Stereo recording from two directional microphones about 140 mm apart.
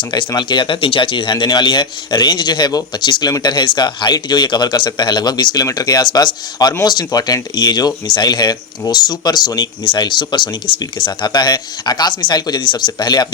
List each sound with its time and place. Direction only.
0.0 s a man's voice: 35° left (ahead or behind)